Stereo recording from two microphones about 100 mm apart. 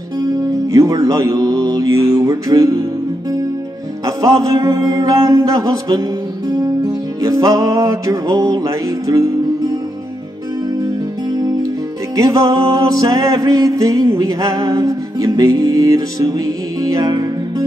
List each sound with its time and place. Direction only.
0.7 s music: 35° right (ahead or behind)
4.0 s music: 35° right (ahead or behind)
7.2 s music: 40° right (ahead or behind)
12.2 s music: 35° right (ahead or behind)